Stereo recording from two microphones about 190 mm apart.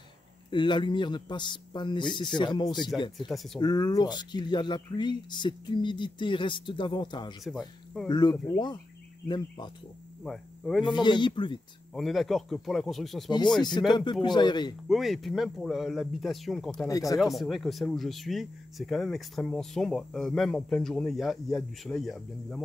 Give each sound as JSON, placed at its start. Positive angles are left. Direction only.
{"t": 0.5, "sound": "speech", "side_deg": 25}
{"t": 3.3, "sound": "speech", "side_deg": 0}
{"t": 3.5, "sound": "speech", "side_deg": 20}
{"t": 7.4, "sound": "speech", "side_deg": 0}
{"t": 8.1, "sound": "speech", "side_deg": 25}
{"t": 10.2, "sound": "speech", "side_deg": 0}
{"t": 10.9, "sound": "speech", "side_deg": 25}
{"t": 11.9, "sound": "speech", "side_deg": 0}
{"t": 13.6, "sound": "speech", "side_deg": 20}
{"t": 14.9, "sound": "speech", "side_deg": 0}
{"t": 16.8, "sound": "speech", "side_deg": 20}
{"t": 17.2, "sound": "speech", "side_deg": 0}